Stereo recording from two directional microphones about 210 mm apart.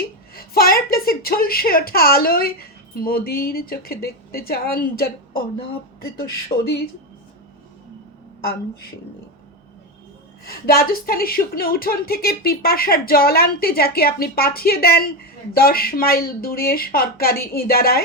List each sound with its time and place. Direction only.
0.3 s a woman's voice: 45° left (ahead or behind)
6.5 s speech: 35° left (ahead or behind)
10.4 s a woman's voice: 45° left (ahead or behind)